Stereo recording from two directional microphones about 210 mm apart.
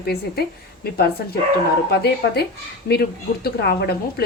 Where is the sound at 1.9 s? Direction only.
50° left (ahead or behind).